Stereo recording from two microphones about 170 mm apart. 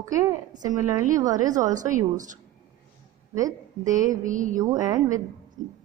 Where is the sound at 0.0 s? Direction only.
20° right (ahead or behind).